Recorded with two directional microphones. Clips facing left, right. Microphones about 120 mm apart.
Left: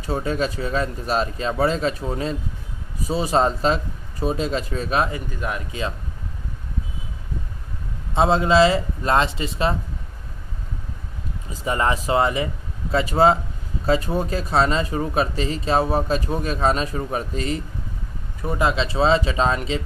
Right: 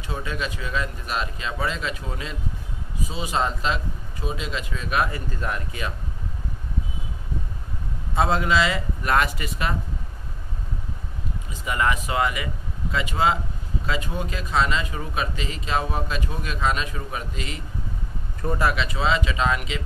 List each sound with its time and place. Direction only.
0.0 s speech: 40° left (ahead or behind)
8.1 s speech: 25° left (ahead or behind)
11.6 s speech: 30° left (ahead or behind)
18.4 s speech: 10° left (ahead or behind)
18.7 s speech: 30° left (ahead or behind)